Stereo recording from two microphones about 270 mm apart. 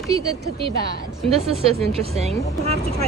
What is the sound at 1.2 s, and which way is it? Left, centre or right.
Speech, right.